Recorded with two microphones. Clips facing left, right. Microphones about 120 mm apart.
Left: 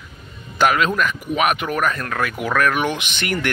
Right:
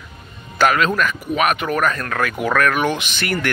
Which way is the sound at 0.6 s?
15° left (ahead or behind).